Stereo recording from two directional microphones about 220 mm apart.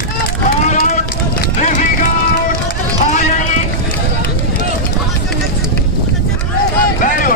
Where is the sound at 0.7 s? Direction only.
35° left (ahead or behind).